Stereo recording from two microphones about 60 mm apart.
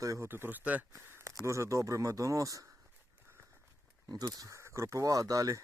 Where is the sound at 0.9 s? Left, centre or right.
Right.